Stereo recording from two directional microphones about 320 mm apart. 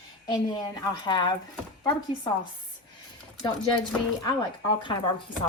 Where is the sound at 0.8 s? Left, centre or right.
Centre.